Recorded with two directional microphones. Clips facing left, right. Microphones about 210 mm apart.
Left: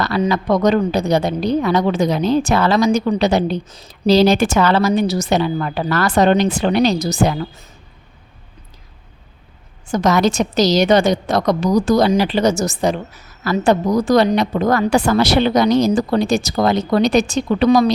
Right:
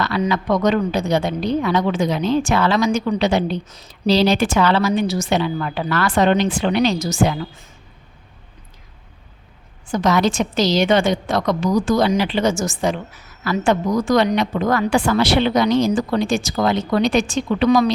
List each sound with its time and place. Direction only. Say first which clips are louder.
0.0 s a woman's voice: left 2 dB; 40° left (ahead or behind)
9.9 s a woman's voice: left 2 dB; 45° left (ahead or behind)